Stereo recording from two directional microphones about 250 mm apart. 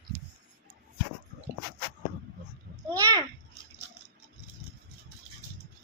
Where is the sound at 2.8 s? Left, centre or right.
Centre.